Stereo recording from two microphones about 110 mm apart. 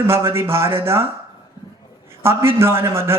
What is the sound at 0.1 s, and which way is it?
Speech, 25° right (ahead or behind).